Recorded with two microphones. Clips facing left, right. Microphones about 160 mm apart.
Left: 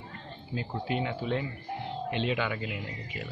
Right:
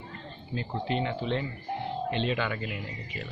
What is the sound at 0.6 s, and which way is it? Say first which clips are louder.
A man's voice: right 1 dB; 10° left (ahead or behind).